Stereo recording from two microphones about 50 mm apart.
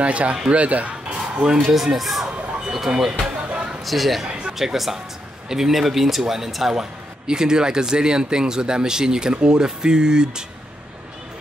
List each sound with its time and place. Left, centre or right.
0.0 s speech: right
1.6 s speech: centre
2.7 s a sound: centre
3.8 s speech: centre